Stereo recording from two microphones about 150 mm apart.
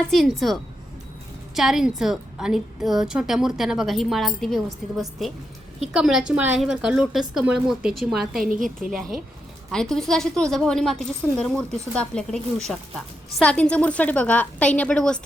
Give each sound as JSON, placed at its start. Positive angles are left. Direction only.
{"t": 0.1, "sound": "a woman's voice", "side_deg": 0}
{"t": 8.4, "sound": "a woman's voice", "side_deg": -60}
{"t": 9.7, "sound": "a woman's voice", "side_deg": 5}